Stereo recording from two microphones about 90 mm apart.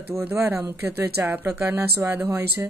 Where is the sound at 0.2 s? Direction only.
25° right (ahead or behind).